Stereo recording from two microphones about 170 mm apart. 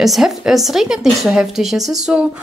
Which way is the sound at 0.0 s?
Centre (ahead or behind).